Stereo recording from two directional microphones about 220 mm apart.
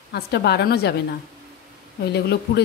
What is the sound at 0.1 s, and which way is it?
Speech, 50° left (ahead or behind).